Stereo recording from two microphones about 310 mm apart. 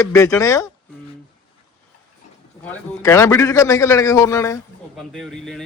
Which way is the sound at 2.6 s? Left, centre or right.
Centre.